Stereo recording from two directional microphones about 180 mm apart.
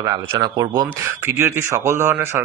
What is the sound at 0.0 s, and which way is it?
Speech, 25° right (ahead or behind).